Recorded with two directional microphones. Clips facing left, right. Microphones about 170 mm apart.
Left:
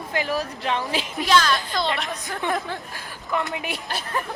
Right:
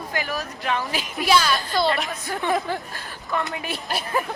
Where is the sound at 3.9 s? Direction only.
10° right (ahead or behind).